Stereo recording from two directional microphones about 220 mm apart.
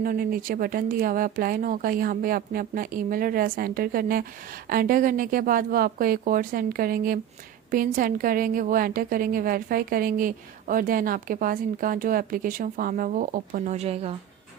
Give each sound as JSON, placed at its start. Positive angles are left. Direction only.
{"t": 0.0, "sound": "speech", "side_deg": -40}